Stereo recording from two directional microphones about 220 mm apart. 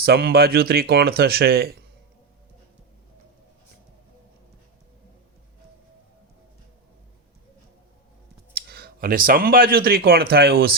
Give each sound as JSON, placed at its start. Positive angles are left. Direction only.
{"t": 0.0, "sound": "speech", "side_deg": -45}
{"t": 8.5, "sound": "speech", "side_deg": -45}